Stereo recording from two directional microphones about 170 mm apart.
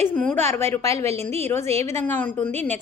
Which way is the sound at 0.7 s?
20° left (ahead or behind).